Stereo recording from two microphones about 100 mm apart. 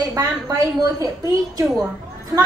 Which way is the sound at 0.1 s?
35° right (ahead or behind).